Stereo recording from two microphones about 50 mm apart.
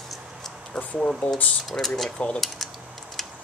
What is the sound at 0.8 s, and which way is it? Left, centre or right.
Speech, centre.